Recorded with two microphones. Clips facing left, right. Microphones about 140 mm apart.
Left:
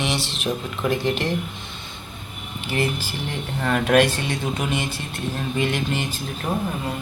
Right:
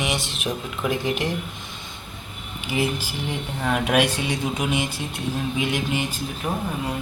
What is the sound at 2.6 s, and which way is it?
Speech, 10° right (ahead or behind).